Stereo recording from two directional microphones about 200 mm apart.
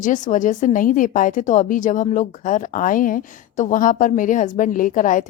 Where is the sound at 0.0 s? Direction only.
40° left (ahead or behind).